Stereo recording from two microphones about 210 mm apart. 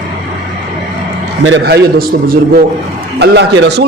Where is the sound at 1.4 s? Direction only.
50° right (ahead or behind).